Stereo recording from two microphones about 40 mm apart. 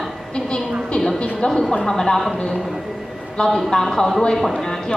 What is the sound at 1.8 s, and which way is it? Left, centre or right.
Speech, centre.